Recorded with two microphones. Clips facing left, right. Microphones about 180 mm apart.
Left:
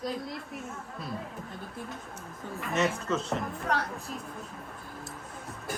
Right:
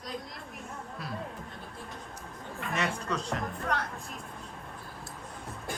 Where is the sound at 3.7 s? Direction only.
30° left (ahead or behind).